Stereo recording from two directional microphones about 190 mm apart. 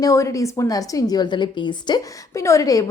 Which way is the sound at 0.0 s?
15° left (ahead or behind).